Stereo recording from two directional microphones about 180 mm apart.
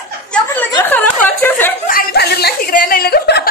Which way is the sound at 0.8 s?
10° left (ahead or behind).